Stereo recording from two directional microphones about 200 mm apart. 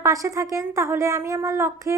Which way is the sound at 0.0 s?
15° right (ahead or behind).